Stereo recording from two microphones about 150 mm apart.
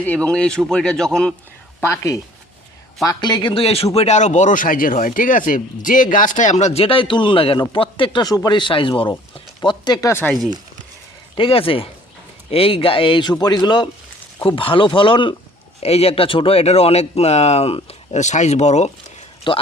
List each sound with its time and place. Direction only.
0.0 s speech: 10° left (ahead or behind)
1.8 s speech: 20° left (ahead or behind)
11.3 s speech: 40° left (ahead or behind)
19.5 s speech: 35° left (ahead or behind)